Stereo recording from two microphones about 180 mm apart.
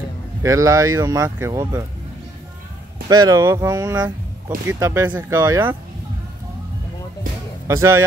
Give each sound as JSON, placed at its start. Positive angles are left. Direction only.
{"t": 0.4, "sound": "speech", "side_deg": -20}
{"t": 3.1, "sound": "speech", "side_deg": -20}
{"t": 7.6, "sound": "speech", "side_deg": -15}